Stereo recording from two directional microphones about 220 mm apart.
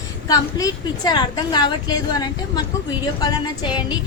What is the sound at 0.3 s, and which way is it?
A woman's voice, 15° left (ahead or behind).